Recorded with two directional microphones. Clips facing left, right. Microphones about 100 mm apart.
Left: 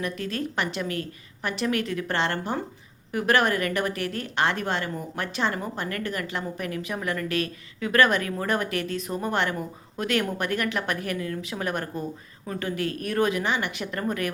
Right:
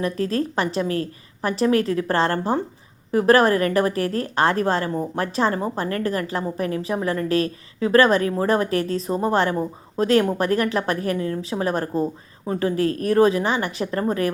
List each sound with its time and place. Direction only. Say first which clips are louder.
0.0 s a woman's voice: right 7 dB; 35° right (ahead or behind)